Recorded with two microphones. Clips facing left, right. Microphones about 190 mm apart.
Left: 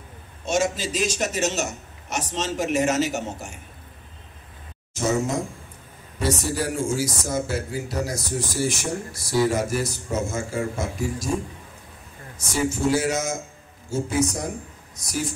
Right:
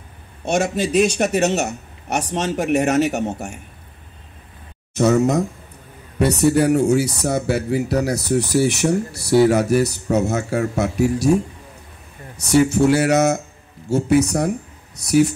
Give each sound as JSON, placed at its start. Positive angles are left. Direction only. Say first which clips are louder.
{"t": 0.5, "sound": "a man's voice", "louder": "right 4 dB", "side_deg": -65}
{"t": 4.9, "sound": "a man's voice", "louder": "right 8 dB", "side_deg": -65}
{"t": 12.4, "sound": "speech", "louder": "right 10 dB", "side_deg": -65}